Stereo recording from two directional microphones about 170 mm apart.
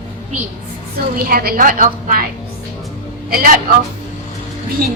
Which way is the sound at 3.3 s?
60° right (ahead or behind).